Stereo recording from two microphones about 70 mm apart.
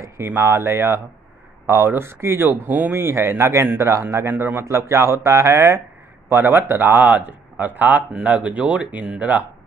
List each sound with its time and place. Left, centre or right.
0.0 s speech: right
6.2 s speech: right